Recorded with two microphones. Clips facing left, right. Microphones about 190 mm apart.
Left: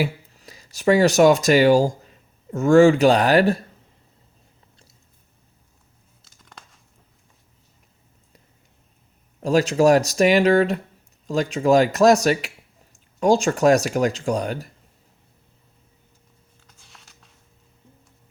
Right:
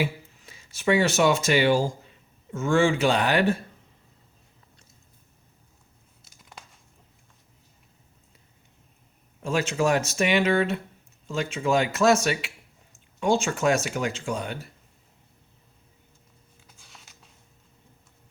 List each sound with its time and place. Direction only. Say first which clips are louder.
0.0 s speech: left 3 dB; 40° left (ahead or behind)
6.4 s crumpling: even; 5° right (ahead or behind)
9.4 s speech: left 8 dB; 40° left (ahead or behind)
16.6 s a sound: even; 5° right (ahead or behind)